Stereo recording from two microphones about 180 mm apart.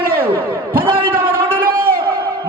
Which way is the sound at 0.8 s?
30° right (ahead or behind).